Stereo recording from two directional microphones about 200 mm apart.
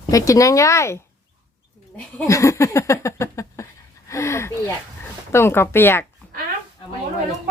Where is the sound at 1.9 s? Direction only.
10° left (ahead or behind).